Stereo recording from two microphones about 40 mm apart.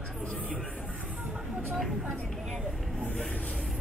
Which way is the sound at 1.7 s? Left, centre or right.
Centre.